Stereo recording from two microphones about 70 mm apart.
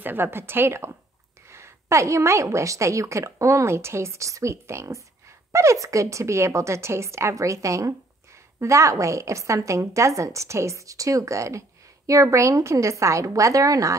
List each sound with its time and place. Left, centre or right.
0.0 s a woman's voice: right